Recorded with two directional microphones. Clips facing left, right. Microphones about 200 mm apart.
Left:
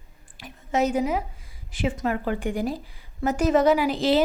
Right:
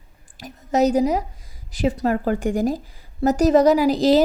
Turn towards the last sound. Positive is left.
turn(degrees=-40)  # may be behind; listen again after turning